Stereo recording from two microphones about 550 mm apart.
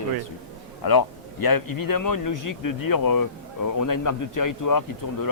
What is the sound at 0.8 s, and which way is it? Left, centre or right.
A man's voice, left.